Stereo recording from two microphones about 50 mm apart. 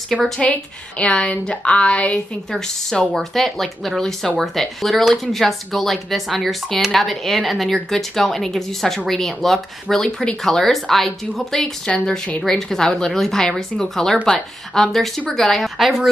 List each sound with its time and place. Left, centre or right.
0.4 s a woman's voice: left
2.5 s speech: centre